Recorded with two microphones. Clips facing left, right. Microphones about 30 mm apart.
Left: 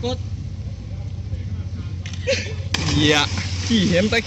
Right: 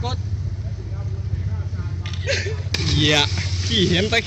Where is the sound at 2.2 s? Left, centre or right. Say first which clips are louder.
Left 2 dB; right.